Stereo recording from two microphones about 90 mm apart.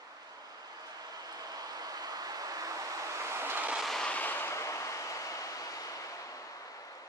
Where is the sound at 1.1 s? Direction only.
45° right (ahead or behind); by 3.7 s 25° right (ahead or behind).